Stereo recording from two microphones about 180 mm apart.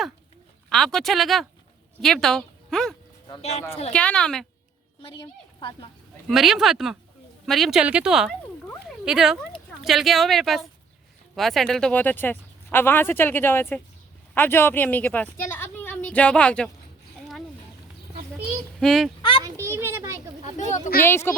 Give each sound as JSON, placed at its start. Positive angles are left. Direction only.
{"t": 0.7, "sound": "a woman's voice", "side_deg": 5}
{"t": 3.9, "sound": "speech", "side_deg": 5}
{"t": 5.2, "sound": "speech", "side_deg": 25}
{"t": 6.2, "sound": "a woman's voice", "side_deg": 0}
{"t": 18.8, "sound": "speech", "side_deg": 0}
{"t": 19.6, "sound": "a sound", "side_deg": -15}
{"t": 20.4, "sound": "speech", "side_deg": 40}
{"t": 21.0, "sound": "speech", "side_deg": 15}